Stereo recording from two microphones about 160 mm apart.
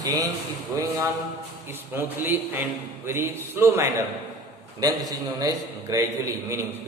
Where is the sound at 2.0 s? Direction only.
15° right (ahead or behind).